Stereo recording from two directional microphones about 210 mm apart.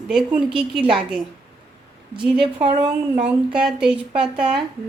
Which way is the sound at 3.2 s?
5° right (ahead or behind).